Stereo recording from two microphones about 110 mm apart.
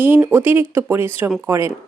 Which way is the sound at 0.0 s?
20° right (ahead or behind).